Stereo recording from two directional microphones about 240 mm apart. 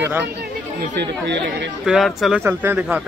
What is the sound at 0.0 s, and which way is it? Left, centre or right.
Speech, centre.